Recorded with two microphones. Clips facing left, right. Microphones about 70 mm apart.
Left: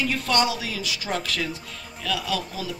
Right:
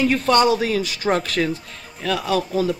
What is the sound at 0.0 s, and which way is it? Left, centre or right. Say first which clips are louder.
Speech: right 7 dB; right.